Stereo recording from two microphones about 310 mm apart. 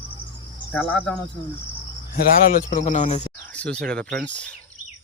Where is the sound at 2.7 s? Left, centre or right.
Left.